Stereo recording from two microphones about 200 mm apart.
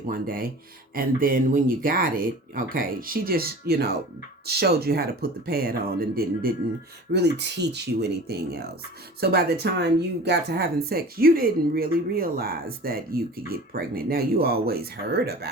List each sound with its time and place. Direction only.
0.1 s speech: 45° right (ahead or behind)